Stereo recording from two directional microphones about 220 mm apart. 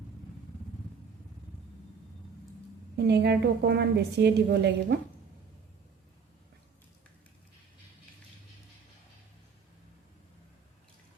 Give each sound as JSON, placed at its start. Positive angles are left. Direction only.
{"t": 2.9, "sound": "a woman's voice", "side_deg": -50}